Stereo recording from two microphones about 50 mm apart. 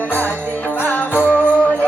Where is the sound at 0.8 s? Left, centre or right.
Left.